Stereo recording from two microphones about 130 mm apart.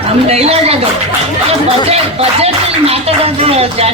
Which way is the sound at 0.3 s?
50° right (ahead or behind).